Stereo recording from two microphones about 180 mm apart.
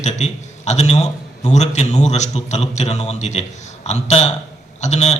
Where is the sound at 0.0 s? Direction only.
40° left (ahead or behind).